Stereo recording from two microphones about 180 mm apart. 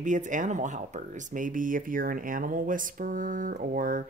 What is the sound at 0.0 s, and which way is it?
Speech, 45° right (ahead or behind).